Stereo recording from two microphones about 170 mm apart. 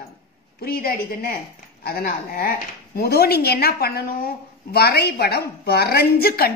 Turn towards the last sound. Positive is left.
turn(degrees=65)  # may be behind; listen again after turning